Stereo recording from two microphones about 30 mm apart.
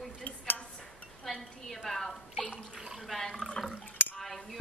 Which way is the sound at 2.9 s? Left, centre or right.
Centre.